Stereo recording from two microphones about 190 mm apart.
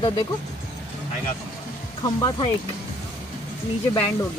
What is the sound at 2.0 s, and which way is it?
Speech, 25° left (ahead or behind).